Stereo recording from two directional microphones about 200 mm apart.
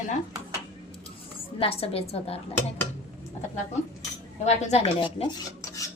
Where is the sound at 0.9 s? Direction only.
25° left (ahead or behind).